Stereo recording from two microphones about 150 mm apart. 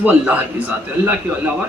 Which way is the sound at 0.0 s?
10° right (ahead or behind).